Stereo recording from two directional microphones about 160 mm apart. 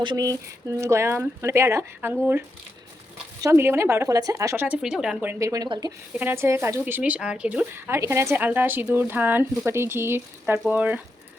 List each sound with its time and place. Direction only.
0.0 s speech: 25° right (ahead or behind)
3.4 s speech: 15° right (ahead or behind)
6.1 s speech: 15° right (ahead or behind)